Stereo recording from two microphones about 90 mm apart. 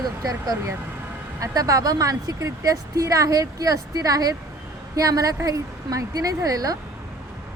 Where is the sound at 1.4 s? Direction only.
40° right (ahead or behind).